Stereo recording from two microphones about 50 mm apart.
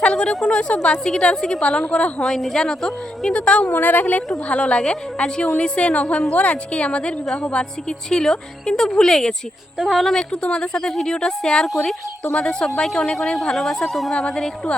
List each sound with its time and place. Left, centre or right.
0.0 s a sound: centre
0.4 s a woman's voice: centre
2.4 s a woman's voice: centre
3.3 s a woman's voice: left
3.7 s a woman's voice: left
4.4 s a woman's voice: left
9.7 s speech: centre
10.2 s a woman's voice: centre